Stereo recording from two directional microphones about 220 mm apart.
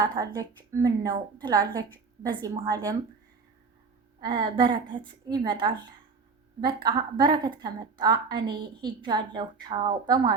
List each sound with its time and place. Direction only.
0.0 s a woman's voice: 15° right (ahead or behind)
4.2 s a woman's voice: 20° right (ahead or behind)